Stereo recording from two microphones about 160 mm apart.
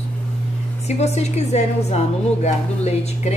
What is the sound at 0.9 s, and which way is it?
A woman's voice, 40° left (ahead or behind).